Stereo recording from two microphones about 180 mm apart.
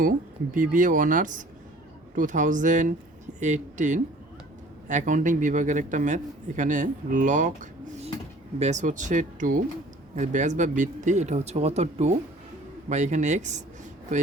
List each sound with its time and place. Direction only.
0.5 s a man's voice: 45° right (ahead or behind)